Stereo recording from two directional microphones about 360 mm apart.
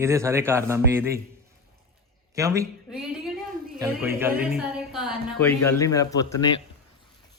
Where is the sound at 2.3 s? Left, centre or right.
Centre.